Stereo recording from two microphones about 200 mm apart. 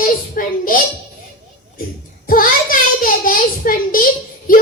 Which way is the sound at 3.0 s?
45° left (ahead or behind).